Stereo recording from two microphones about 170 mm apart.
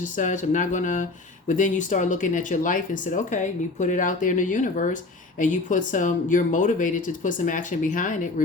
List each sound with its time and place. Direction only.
0.0 s speech: 45° left (ahead or behind)